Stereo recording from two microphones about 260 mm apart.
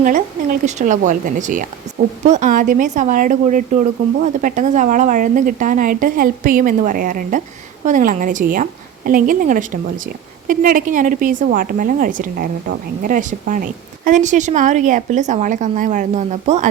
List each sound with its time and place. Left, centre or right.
0.0 s a woman's voice: right